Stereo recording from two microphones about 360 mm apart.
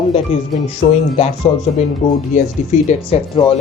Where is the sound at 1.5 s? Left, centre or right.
Centre.